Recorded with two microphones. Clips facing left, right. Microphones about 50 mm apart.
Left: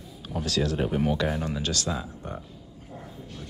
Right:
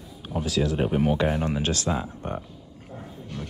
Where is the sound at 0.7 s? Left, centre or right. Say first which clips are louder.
Right 3 dB; right.